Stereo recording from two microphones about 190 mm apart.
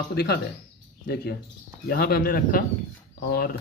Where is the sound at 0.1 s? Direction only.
60° left (ahead or behind).